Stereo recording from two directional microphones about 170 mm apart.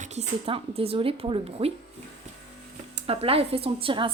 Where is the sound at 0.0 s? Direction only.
40° right (ahead or behind).